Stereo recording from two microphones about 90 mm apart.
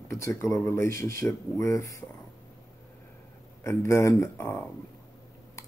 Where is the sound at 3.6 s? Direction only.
30° left (ahead or behind).